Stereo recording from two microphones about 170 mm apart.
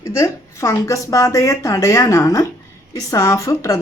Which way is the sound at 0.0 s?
15° left (ahead or behind).